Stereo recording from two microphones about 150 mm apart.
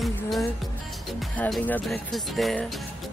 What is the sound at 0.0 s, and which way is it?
Music, centre (ahead or behind).